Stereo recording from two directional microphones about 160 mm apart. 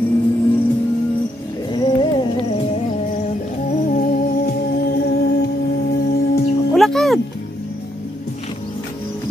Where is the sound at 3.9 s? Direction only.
70° left (ahead or behind).